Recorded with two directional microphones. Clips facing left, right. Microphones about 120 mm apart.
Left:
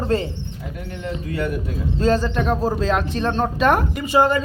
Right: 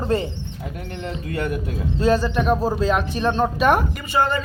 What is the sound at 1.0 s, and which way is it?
Speech, 50° right (ahead or behind).